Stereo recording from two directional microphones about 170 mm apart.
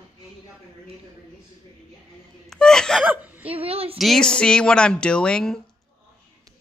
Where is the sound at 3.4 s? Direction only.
35° right (ahead or behind).